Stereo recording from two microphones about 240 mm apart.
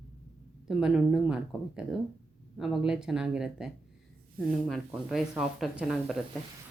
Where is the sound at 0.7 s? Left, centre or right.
Centre.